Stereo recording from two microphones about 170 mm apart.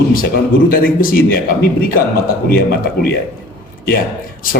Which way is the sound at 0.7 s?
60° left (ahead or behind).